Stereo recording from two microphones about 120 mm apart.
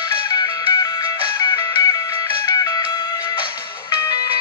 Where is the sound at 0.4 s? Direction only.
35° left (ahead or behind).